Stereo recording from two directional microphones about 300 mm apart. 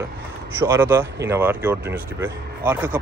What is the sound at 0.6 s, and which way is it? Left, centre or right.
Speech, centre.